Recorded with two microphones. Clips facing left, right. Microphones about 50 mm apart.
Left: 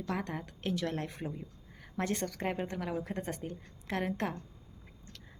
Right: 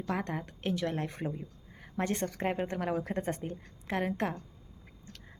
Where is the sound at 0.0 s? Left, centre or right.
Right.